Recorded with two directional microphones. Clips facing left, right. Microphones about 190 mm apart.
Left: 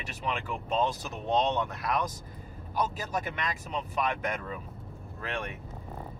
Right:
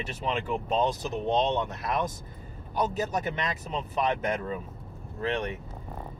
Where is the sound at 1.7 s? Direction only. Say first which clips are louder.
Right 1 dB; 25° right (ahead or behind).